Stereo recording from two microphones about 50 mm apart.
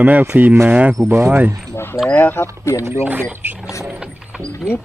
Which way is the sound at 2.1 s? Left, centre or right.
Left.